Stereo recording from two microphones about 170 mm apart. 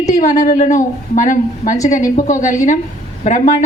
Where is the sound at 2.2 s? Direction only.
45° left (ahead or behind).